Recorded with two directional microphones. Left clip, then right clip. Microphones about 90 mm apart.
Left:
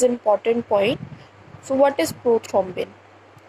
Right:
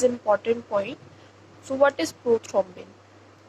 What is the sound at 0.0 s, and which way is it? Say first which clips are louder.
A woman's voice: left 4 dB; 35° left (ahead or behind).